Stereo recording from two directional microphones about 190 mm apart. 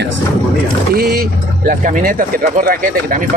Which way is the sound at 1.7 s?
45° right (ahead or behind).